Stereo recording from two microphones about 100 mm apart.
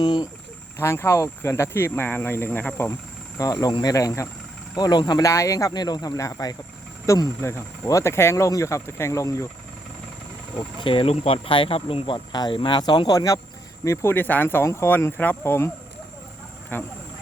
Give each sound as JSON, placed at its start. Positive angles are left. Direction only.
{"t": 0.0, "sound": "speech", "side_deg": 45}
{"t": 0.8, "sound": "speech", "side_deg": 25}
{"t": 3.3, "sound": "speech", "side_deg": 35}
{"t": 4.8, "sound": "speech", "side_deg": 45}
{"t": 10.8, "sound": "speech", "side_deg": 60}
{"t": 16.7, "sound": "speech", "side_deg": 20}